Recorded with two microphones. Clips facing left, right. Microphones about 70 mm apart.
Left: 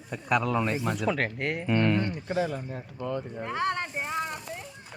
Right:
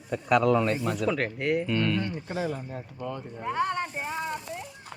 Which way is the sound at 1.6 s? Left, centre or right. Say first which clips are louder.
Left 2 dB; left.